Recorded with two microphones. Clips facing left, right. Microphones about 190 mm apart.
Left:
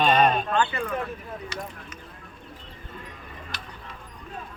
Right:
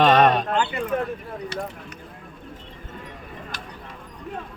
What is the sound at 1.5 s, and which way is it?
Speech, 60° right (ahead or behind).